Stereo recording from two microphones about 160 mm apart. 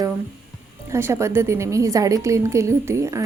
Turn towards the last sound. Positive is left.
turn(degrees=-20)  # may be behind; listen again after turning